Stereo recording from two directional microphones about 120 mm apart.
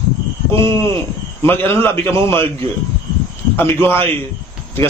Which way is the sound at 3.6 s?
15° left (ahead or behind).